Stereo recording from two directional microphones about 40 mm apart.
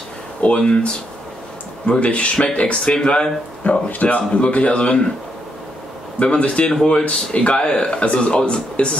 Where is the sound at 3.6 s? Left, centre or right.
Left.